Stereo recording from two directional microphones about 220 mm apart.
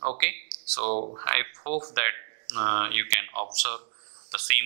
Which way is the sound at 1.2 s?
15° right (ahead or behind).